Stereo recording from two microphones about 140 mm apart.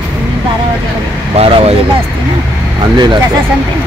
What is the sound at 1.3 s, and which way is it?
Speech, 45° right (ahead or behind).